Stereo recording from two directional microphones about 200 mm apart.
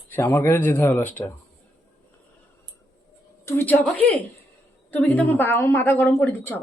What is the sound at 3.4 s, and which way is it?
Speech, 10° left (ahead or behind).